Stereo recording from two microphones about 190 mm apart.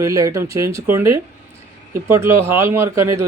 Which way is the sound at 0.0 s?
15° right (ahead or behind).